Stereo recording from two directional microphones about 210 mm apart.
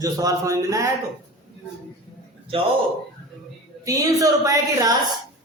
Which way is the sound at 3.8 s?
15° right (ahead or behind).